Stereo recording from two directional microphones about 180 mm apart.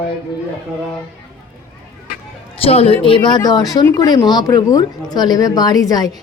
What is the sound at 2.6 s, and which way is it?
Speech, 35° left (ahead or behind).